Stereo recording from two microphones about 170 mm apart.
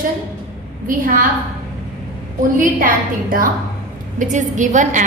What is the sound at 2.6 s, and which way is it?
A woman's voice, 55° right (ahead or behind).